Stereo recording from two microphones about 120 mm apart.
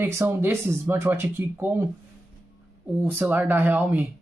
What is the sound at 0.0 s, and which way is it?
Speech, 20° right (ahead or behind).